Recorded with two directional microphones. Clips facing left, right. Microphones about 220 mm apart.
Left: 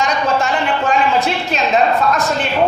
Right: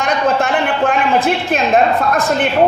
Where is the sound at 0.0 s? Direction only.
55° right (ahead or behind).